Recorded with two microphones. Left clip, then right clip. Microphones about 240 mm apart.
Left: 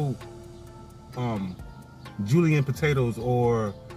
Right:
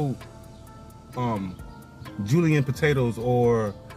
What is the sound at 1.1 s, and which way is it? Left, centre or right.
Speech, centre.